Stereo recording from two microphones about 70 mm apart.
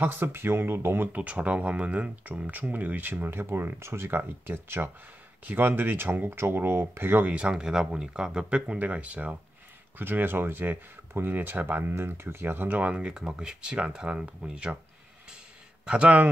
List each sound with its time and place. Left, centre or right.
0.0 s speech: right
1.1 s speech: centre
7.3 s speech: centre
15.8 s a man's voice: centre